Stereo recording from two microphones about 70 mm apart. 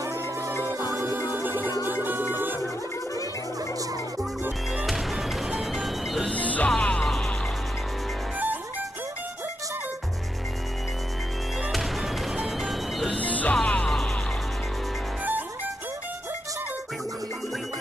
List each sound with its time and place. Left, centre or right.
0.0 s music: right
0.7 s music: right
4.8 s music: centre
6.3 s music: left
11.7 s music: centre
13.1 s music: left